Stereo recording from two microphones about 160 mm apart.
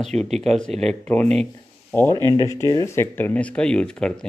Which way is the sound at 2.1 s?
25° right (ahead or behind).